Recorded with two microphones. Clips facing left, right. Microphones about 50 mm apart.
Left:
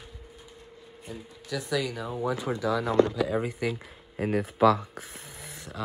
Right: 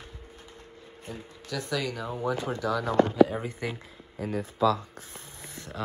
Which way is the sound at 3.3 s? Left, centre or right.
Left.